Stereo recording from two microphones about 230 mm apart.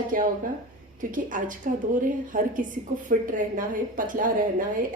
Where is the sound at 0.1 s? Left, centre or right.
Right.